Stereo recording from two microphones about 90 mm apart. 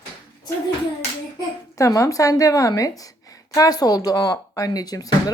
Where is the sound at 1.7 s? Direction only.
40° left (ahead or behind).